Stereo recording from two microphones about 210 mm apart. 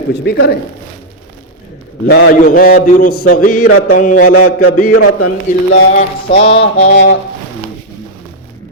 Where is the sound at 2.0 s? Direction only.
50° left (ahead or behind).